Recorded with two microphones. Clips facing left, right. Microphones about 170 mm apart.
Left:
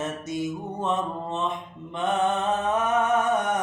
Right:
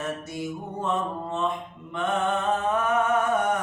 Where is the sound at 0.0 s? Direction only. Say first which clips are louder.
Left 2 dB; 20° left (ahead or behind).